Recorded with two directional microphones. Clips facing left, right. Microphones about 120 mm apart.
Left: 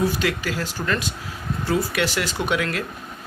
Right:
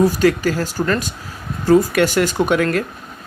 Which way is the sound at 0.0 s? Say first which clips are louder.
Right 8 dB; 40° right (ahead or behind).